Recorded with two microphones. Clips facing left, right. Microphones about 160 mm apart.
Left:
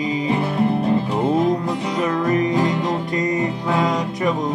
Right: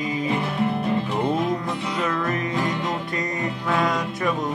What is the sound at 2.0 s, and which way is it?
Music, 15° left (ahead or behind).